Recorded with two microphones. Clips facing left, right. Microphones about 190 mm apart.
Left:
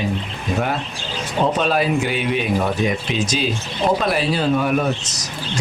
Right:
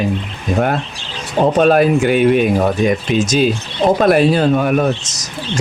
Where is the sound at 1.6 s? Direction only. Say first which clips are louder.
Right 7 dB; 50° right (ahead or behind).